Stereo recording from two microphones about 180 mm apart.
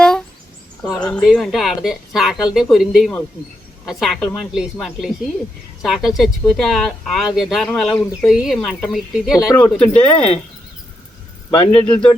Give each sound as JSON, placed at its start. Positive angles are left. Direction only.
{"t": 0.0, "sound": "a sound", "side_deg": 5}
{"t": 0.8, "sound": "speech", "side_deg": 5}
{"t": 11.5, "sound": "speech", "side_deg": 35}